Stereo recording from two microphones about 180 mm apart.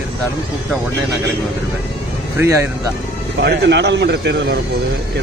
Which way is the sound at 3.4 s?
70° right (ahead or behind).